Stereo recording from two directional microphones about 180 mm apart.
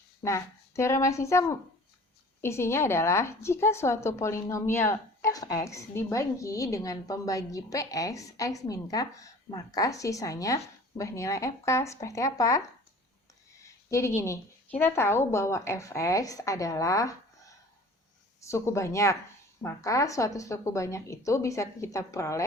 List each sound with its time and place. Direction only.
0.2 s speech: 15° left (ahead or behind)
18.4 s speech: 15° left (ahead or behind)